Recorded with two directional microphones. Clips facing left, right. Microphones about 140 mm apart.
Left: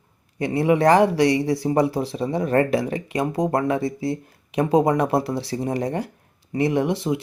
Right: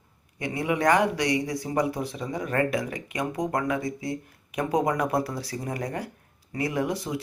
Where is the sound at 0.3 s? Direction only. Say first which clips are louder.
Left 8 dB; 35° left (ahead or behind).